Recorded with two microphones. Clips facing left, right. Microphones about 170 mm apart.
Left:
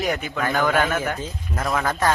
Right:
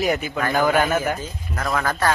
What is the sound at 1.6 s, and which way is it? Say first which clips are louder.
Speech: even; centre (ahead or behind).